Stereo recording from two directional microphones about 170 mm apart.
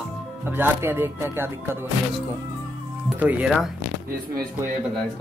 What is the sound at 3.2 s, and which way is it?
Speech, 10° right (ahead or behind).